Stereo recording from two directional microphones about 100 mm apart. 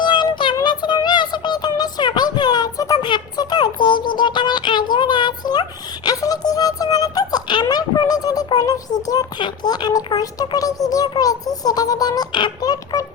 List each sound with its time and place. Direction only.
0.0 s music: 45° left (ahead or behind)
3.1 s a sound: 45° left (ahead or behind)
6.1 s music: 40° left (ahead or behind)
8.4 s a child's voice: 40° left (ahead or behind)